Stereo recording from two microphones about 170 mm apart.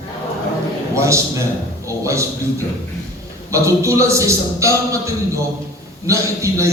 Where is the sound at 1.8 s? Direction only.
15° right (ahead or behind).